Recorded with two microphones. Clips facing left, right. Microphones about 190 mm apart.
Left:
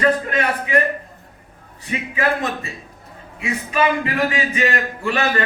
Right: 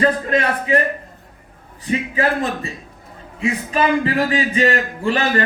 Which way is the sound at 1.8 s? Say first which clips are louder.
Right 3 dB; 35° right (ahead or behind).